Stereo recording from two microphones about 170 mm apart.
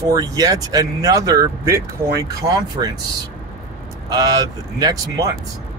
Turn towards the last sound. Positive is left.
turn(degrees=-20)  # may be behind; listen again after turning